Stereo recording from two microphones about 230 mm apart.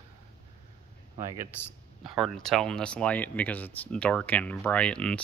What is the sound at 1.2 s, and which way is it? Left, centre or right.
Speech, centre.